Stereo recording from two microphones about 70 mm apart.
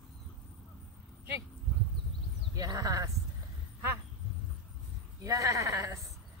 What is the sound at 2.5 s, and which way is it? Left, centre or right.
Speech, right.